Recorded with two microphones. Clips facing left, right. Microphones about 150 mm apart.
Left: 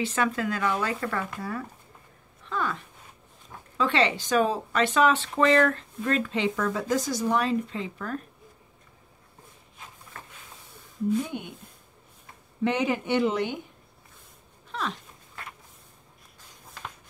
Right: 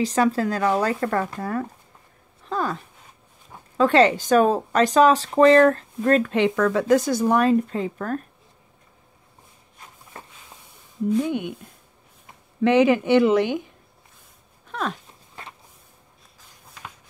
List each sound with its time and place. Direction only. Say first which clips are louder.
0.0 s speech: right 6 dB; 35° right (ahead or behind)
11.2 s speech: right 10 dB; 90° right
12.6 s speech: right 9 dB; 90° right
14.7 s a sound: right 4 dB; 50° right (ahead or behind)